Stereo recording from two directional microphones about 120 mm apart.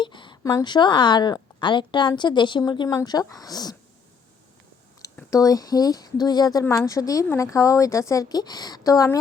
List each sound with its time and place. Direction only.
0.0 s a sound: 40° left (ahead or behind)
0.5 s a woman's voice: 40° left (ahead or behind)
5.3 s speech: 30° left (ahead or behind)